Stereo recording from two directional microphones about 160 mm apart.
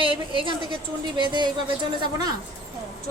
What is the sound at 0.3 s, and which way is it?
A woman's voice, 30° right (ahead or behind).